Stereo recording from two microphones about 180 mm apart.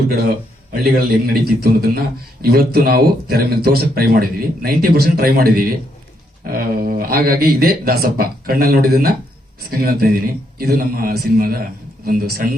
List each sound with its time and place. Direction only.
0.7 s a man's voice: 55° right (ahead or behind)